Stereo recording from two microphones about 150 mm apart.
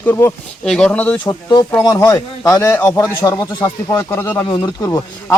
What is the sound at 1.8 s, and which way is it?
Speech, 20° left (ahead or behind).